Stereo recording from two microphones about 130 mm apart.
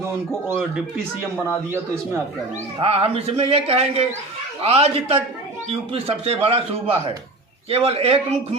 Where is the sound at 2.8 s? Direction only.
50° right (ahead or behind).